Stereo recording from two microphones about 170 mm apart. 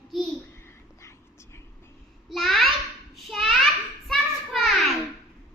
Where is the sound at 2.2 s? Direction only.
Centre (ahead or behind).